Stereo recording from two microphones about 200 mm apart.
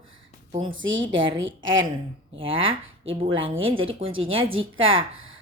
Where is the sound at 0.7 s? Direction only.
70° right (ahead or behind).